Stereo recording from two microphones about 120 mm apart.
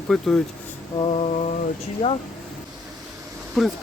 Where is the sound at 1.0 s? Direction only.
55° left (ahead or behind); by 1.6 s 70° left (ahead or behind).